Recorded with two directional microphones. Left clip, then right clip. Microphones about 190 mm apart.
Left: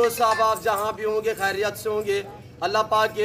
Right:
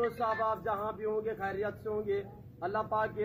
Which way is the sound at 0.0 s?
40° left (ahead or behind).